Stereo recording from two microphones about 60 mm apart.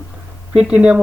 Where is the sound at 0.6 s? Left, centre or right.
Centre.